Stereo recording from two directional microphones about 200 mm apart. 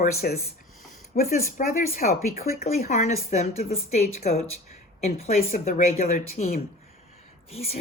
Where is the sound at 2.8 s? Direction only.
35° left (ahead or behind).